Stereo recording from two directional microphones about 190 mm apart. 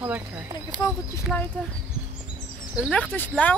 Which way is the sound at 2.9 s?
10° left (ahead or behind).